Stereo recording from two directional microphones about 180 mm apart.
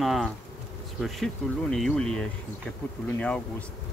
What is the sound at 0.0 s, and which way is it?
Speech, centre (ahead or behind).